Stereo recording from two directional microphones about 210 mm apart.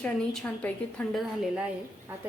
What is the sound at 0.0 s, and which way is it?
A woman's voice, 5° left (ahead or behind).